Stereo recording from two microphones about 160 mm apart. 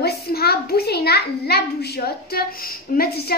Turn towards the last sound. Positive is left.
turn(degrees=75)  # may be behind; listen again after turning